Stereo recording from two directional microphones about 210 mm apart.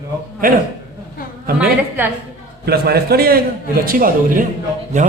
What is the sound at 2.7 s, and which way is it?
A man's voice, 50° right (ahead or behind).